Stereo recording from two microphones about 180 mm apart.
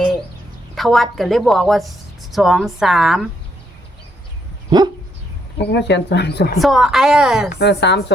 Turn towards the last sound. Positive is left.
turn(degrees=70)  # may be behind; listen again after turning